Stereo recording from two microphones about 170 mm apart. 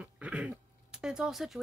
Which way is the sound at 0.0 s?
5° right (ahead or behind).